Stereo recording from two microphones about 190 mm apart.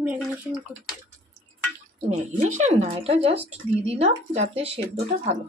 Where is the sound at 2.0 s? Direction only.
40° right (ahead or behind).